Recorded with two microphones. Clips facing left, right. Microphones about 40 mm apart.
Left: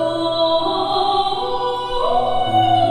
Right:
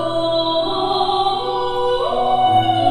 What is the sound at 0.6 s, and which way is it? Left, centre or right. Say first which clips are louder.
Music: even; centre.